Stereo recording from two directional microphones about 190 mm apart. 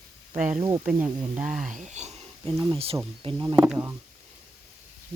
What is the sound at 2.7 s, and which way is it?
Speech, 30° right (ahead or behind).